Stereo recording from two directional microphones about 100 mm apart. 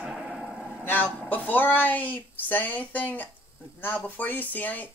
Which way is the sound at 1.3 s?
20° left (ahead or behind).